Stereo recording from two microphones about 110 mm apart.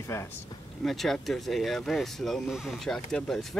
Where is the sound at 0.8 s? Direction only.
Centre (ahead or behind).